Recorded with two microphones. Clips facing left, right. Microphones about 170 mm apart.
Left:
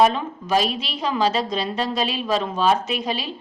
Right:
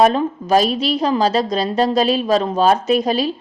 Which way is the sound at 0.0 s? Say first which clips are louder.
Right 4 dB; 40° right (ahead or behind).